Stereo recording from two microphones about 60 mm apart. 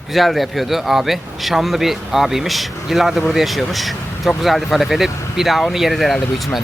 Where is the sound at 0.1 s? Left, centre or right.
Centre.